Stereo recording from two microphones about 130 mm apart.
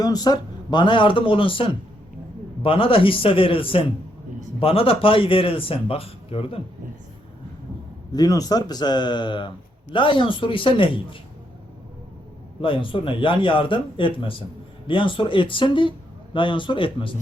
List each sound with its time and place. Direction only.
0.0 s a man's voice: 30° left (ahead or behind); by 6.6 s 45° left (ahead or behind)
8.1 s speech: 30° left (ahead or behind)
12.6 s speech: 40° left (ahead or behind)